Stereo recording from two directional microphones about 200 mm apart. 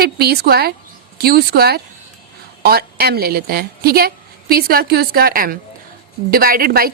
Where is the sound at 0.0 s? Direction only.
50° right (ahead or behind).